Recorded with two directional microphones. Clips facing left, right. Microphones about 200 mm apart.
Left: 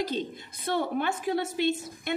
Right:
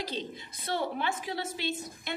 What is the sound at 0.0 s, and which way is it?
A woman's voice, 50° left (ahead or behind).